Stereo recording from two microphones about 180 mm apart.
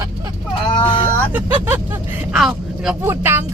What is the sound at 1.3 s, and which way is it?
Speech, 10° right (ahead or behind).